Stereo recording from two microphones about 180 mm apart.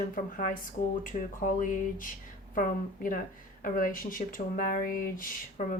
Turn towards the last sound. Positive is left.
turn(degrees=50)  # may be behind; listen again after turning